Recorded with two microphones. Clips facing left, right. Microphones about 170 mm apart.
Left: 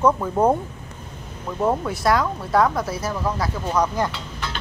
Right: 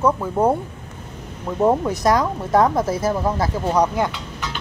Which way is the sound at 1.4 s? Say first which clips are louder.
Right 4 dB; 15° right (ahead or behind).